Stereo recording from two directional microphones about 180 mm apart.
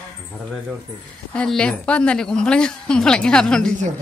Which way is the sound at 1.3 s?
5° left (ahead or behind).